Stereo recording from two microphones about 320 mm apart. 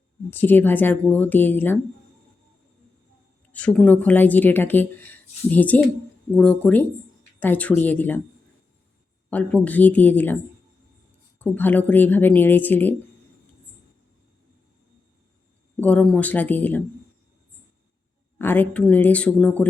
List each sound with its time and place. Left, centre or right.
0.3 s speech: centre
3.5 s speech: centre
9.3 s speech: centre
11.3 s speech: centre
15.8 s speech: centre
18.3 s speech: centre